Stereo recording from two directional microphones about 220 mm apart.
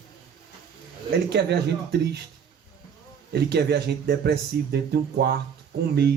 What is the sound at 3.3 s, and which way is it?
Speech, 50° right (ahead or behind).